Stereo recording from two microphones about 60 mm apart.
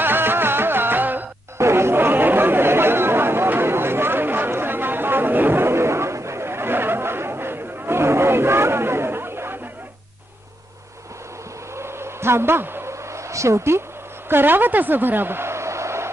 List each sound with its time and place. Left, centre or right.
0.0 s music: right
1.5 s chatter: right
11.8 s a sound: right
14.3 s a woman's voice: right